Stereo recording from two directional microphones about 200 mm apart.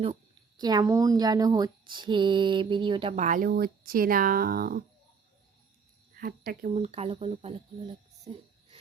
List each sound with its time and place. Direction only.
0.0 s speech: 25° right (ahead or behind)
3.2 s speech: 45° right (ahead or behind)
6.1 s speech: 50° right (ahead or behind)
6.7 s speech: 35° right (ahead or behind)